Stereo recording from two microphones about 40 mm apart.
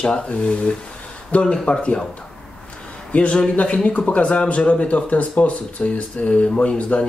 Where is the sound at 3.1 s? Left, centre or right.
Left.